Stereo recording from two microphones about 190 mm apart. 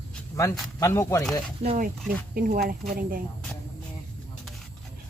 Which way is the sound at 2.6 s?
50° right (ahead or behind).